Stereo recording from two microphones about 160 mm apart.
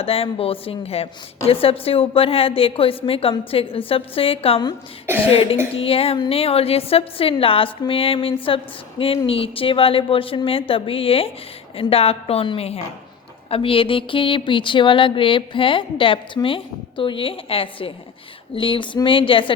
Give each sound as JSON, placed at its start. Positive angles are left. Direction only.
{"t": 0.0, "sound": "speech", "side_deg": 35}